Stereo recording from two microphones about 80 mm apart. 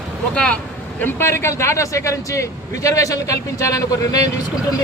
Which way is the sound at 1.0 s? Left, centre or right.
Left.